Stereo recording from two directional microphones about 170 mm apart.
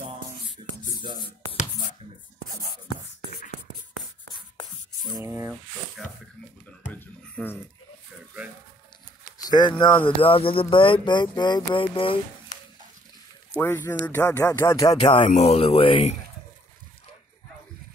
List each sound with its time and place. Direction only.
0.6 s rub: 35° right (ahead or behind)
5.0 s a sound: 20° right (ahead or behind)
6.9 s a sound: 10° left (ahead or behind)
9.4 s speech: 25° left (ahead or behind)
13.6 s speech: 15° left (ahead or behind)
15.2 s speech: 40° left (ahead or behind)